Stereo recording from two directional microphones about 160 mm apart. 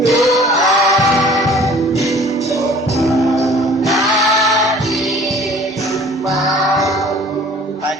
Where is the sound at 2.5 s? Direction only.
20° left (ahead or behind).